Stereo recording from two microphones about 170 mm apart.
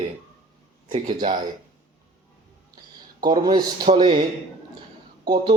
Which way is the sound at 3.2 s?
25° right (ahead or behind).